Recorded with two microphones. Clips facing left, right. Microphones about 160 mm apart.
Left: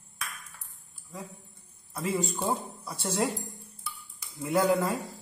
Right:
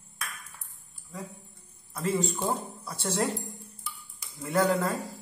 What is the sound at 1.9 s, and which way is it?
Speech, centre (ahead or behind).